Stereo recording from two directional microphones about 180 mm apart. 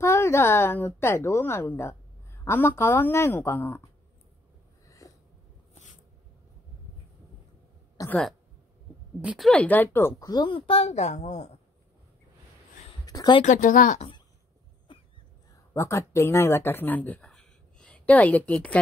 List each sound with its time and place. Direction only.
0.0 s a woman's voice: 15° left (ahead or behind)
4.8 s a sound: 20° left (ahead or behind)
8.0 s a sound: 20° left (ahead or behind)
9.2 s a woman's voice: 5° right (ahead or behind)
9.5 s speech: 10° left (ahead or behind); by 11.5 s 40° left (ahead or behind)
13.0 s a sound: 20° left (ahead or behind)
13.4 s speech: 45° left (ahead or behind)
14.9 s cough: 30° left (ahead or behind)
15.7 s speech: 15° left (ahead or behind)